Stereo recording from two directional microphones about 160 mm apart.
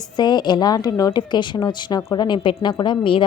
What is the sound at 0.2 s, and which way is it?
A woman's voice, 25° left (ahead or behind).